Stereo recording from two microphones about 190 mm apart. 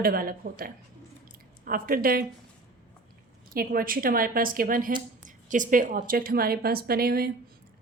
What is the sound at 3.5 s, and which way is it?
A woman's voice, 50° right (ahead or behind).